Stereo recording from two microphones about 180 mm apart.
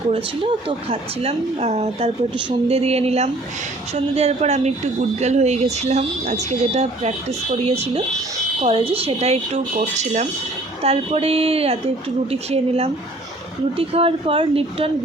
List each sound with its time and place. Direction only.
0.1 s speech: 30° right (ahead or behind)